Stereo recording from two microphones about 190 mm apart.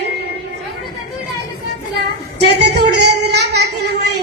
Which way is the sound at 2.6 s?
60° right (ahead or behind).